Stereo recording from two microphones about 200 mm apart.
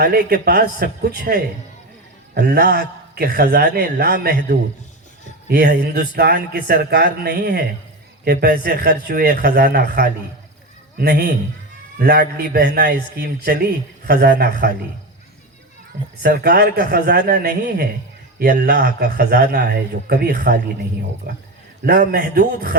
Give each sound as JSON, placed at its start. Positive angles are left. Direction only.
{"t": 0.0, "sound": "a man's voice", "side_deg": -50}
{"t": 16.2, "sound": "a man's voice", "side_deg": -50}